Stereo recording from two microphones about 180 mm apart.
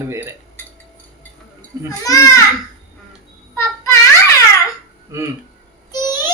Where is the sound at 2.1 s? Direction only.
15° left (ahead or behind).